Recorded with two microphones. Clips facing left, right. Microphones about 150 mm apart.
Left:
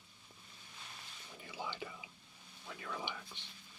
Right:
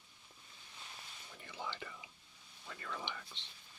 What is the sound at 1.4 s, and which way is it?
Whispering, 10° left (ahead or behind).